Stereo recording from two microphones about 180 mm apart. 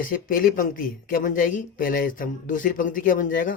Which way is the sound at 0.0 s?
50° left (ahead or behind).